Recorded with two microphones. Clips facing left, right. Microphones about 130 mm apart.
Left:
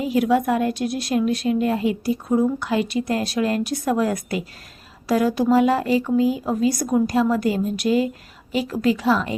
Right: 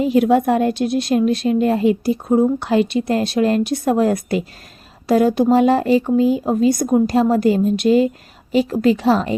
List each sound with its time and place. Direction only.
0.0 s speech: 30° right (ahead or behind)